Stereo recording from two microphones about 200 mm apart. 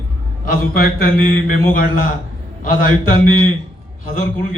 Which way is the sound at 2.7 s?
40° left (ahead or behind).